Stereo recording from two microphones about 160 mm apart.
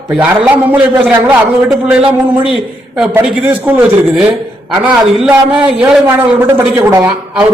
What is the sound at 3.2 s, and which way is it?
A man's voice, 10° right (ahead or behind).